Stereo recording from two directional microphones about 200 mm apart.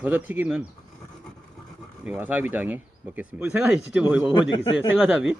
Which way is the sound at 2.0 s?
5° right (ahead or behind).